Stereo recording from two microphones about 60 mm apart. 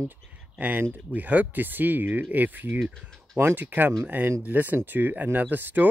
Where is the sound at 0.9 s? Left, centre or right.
Right.